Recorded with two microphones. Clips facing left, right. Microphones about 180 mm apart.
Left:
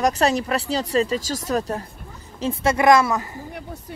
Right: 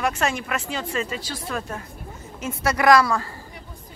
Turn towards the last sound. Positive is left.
turn(degrees=20)  # may be behind; listen again after turning